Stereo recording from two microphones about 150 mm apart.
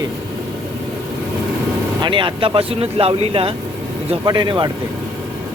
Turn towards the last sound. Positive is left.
turn(degrees=-30)  # may be behind; listen again after turning